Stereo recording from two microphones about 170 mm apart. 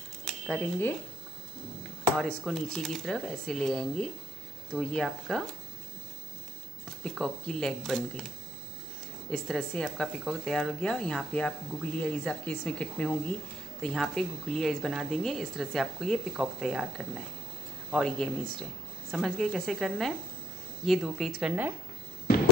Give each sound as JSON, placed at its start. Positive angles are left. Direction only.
{"t": 0.2, "sound": "a sound", "side_deg": 5}
{"t": 2.1, "sound": "speech", "side_deg": 5}
{"t": 7.0, "sound": "speech", "side_deg": 5}
{"t": 9.3, "sound": "speech", "side_deg": 5}